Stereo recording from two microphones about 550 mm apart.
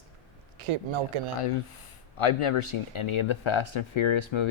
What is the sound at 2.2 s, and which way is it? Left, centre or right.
Speech, left.